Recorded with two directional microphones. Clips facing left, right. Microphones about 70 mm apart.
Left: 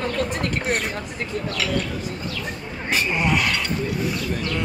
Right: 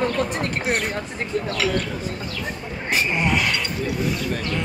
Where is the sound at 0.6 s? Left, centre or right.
Centre.